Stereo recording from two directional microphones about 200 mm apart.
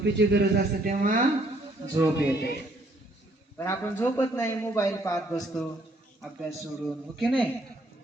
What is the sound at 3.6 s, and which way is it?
A man's voice, 15° left (ahead or behind).